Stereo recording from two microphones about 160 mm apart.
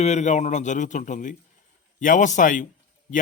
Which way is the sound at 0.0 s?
45° left (ahead or behind).